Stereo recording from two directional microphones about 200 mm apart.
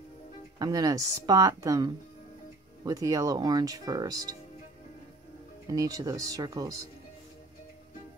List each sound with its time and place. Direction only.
0.6 s speech: 20° right (ahead or behind)
5.7 s speech: 15° right (ahead or behind)